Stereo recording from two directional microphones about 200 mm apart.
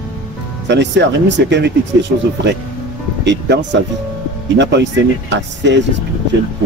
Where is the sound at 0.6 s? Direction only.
60° right (ahead or behind).